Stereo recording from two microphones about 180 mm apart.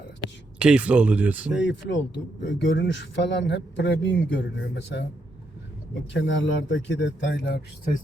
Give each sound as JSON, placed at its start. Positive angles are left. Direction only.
{"t": 0.6, "sound": "speech", "side_deg": -5}
{"t": 1.5, "sound": "speech", "side_deg": 90}
{"t": 6.1, "sound": "speech", "side_deg": 90}